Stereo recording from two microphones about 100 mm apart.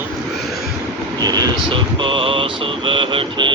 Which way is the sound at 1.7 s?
60° right (ahead or behind).